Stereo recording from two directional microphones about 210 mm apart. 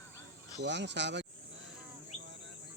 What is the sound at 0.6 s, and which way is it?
Speech, 55° right (ahead or behind).